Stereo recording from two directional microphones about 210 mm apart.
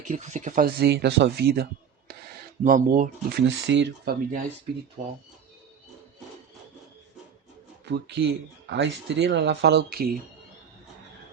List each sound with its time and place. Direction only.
0.0 s speech: 35° right (ahead or behind); by 4.1 s 55° right (ahead or behind)
5.0 s speech: 35° right (ahead or behind)
7.9 s speech: 55° right (ahead or behind)